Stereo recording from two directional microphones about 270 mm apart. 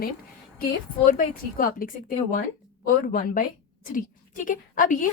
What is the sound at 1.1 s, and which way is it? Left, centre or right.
A woman's voice, left.